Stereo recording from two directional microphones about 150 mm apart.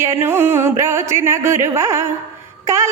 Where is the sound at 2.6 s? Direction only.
20° right (ahead or behind).